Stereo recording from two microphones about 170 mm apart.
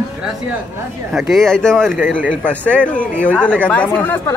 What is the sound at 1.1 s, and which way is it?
Speech, centre (ahead or behind).